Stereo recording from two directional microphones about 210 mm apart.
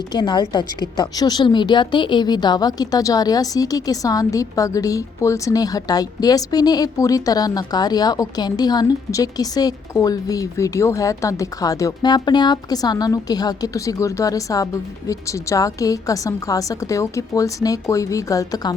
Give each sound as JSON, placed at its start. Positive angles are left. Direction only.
{"t": 0.1, "sound": "a woman's voice", "side_deg": 20}